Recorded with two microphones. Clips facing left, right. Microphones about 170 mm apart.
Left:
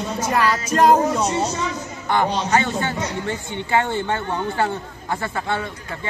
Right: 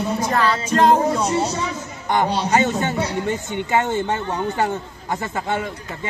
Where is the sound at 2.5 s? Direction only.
20° right (ahead or behind).